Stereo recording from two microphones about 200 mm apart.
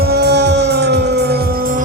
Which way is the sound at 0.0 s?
55° right (ahead or behind).